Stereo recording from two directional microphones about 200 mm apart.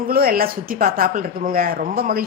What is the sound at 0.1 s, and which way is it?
A woman's voice, 50° right (ahead or behind).